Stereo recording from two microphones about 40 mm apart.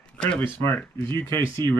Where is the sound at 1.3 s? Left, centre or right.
Left.